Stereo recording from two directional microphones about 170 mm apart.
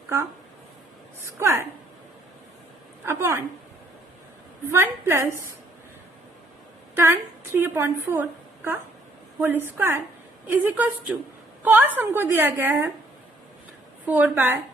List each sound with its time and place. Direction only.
1.2 s a woman's voice: 15° right (ahead or behind)
3.1 s a woman's voice: 15° right (ahead or behind)
4.7 s a woman's voice: 15° right (ahead or behind)
6.9 s a woman's voice: 15° right (ahead or behind)
14.0 s a woman's voice: 10° right (ahead or behind)